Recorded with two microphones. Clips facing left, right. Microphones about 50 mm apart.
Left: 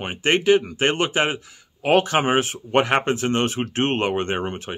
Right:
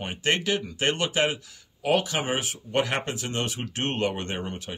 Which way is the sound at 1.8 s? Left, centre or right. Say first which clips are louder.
Left 6 dB; left.